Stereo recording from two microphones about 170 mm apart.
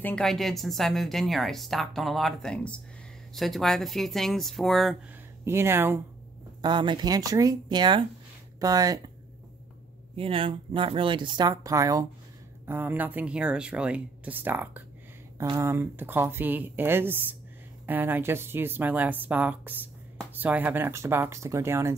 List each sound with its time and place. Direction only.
0.0 s speech: 5° left (ahead or behind)
5.4 s speech: 15° right (ahead or behind)
6.6 s speech: 25° right (ahead or behind)
10.1 s speech: 35° right (ahead or behind); by 21.9 s 15° right (ahead or behind)